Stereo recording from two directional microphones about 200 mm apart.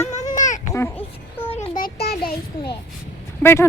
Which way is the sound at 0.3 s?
40° left (ahead or behind).